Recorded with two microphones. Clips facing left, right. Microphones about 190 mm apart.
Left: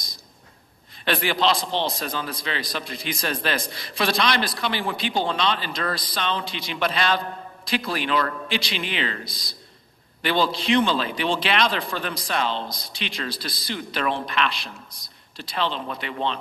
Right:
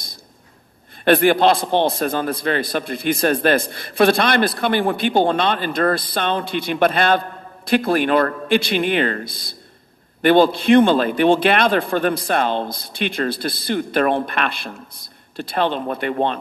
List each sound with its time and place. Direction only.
1.0 s a man's voice: 55° right (ahead or behind)